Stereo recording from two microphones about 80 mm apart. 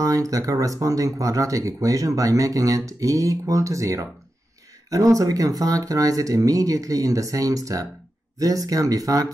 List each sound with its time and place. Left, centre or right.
0.0 s speech: right